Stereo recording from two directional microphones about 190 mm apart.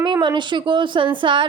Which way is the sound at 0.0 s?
25° right (ahead or behind).